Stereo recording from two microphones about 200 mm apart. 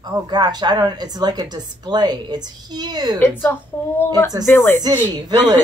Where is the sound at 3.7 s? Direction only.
10° left (ahead or behind).